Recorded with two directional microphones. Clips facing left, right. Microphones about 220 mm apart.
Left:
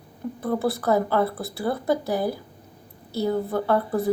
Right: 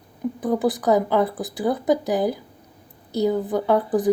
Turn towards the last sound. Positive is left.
turn(degrees=-15)  # may be behind; listen again after turning